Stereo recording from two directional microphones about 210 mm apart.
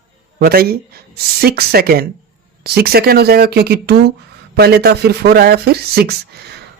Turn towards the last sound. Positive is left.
turn(degrees=-50)  # may be behind; listen again after turning